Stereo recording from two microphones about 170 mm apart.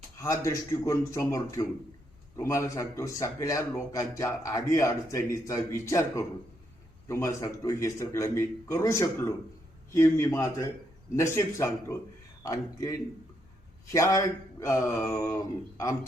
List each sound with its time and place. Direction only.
0.2 s speech: 20° left (ahead or behind)